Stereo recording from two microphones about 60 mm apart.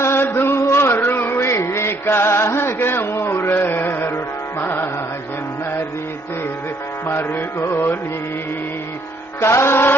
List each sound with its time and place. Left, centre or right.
0.0 s chant: left
0.5 s a sound: left
1.4 s music: left
2.7 s a sound: left
4.6 s music: left
7.1 s music: left
9.4 s music: left